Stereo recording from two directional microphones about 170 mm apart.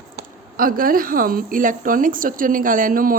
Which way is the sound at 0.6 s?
55° right (ahead or behind).